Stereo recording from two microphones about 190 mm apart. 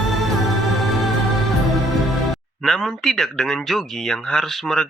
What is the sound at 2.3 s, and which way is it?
Speech, centre (ahead or behind).